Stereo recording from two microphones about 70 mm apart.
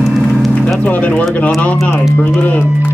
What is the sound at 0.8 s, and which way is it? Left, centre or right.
Speech, left.